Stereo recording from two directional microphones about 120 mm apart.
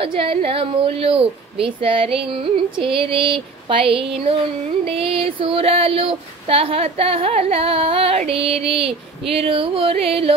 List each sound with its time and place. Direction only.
0.0 s a woman's voice: 50° right (ahead or behind)